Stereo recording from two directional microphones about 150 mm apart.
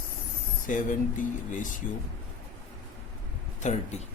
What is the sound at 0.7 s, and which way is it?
Speech, 60° left (ahead or behind).